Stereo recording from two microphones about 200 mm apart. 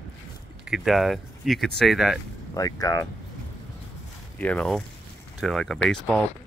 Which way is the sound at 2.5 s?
15° left (ahead or behind).